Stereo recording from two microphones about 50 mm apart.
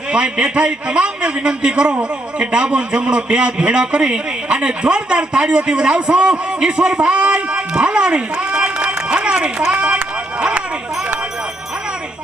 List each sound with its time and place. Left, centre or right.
0.1 s a man's voice: centre